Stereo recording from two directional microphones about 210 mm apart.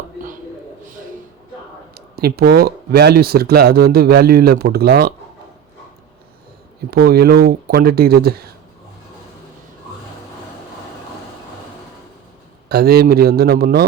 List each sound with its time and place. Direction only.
2.1 s speech: 45° right (ahead or behind)
6.9 s speech: 45° right (ahead or behind)
12.6 s speech: 50° right (ahead or behind)